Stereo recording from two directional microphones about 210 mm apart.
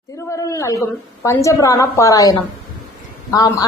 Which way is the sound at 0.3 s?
15° left (ahead or behind).